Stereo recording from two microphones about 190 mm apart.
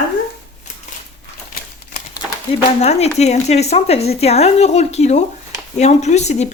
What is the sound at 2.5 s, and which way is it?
Speech, 35° left (ahead or behind).